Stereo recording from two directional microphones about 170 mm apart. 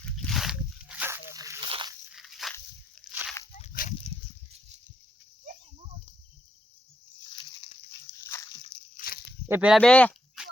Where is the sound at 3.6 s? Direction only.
50° left (ahead or behind).